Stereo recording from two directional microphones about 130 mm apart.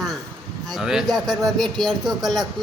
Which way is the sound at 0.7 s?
5° right (ahead or behind).